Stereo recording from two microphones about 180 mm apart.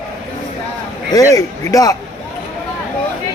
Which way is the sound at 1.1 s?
20° left (ahead or behind).